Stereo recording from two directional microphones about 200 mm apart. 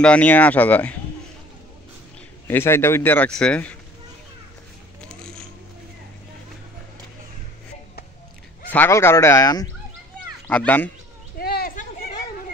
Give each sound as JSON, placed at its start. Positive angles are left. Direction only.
{"t": 0.0, "sound": "a man's voice", "side_deg": 5}
{"t": 2.4, "sound": "a man's voice", "side_deg": 10}
{"t": 5.0, "sound": "zipper", "side_deg": 5}
{"t": 8.6, "sound": "a man's voice", "side_deg": 10}
{"t": 10.4, "sound": "a child's voice", "side_deg": 5}
{"t": 11.3, "sound": "a sound", "side_deg": 50}